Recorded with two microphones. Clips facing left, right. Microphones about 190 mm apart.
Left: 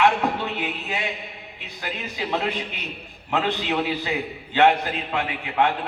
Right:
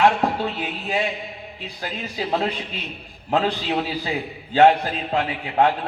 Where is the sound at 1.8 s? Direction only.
40° right (ahead or behind).